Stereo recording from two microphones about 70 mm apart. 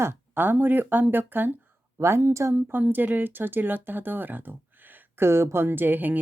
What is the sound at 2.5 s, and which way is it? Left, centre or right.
Speech, right.